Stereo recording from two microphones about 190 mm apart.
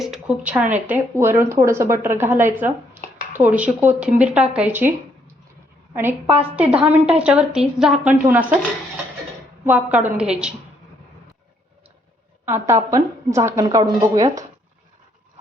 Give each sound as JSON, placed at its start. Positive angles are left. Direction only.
{"t": 0.0, "sound": "speech", "side_deg": -5}
{"t": 5.9, "sound": "a woman's voice", "side_deg": -10}
{"t": 9.6, "sound": "speech", "side_deg": -10}
{"t": 12.5, "sound": "speech", "side_deg": -15}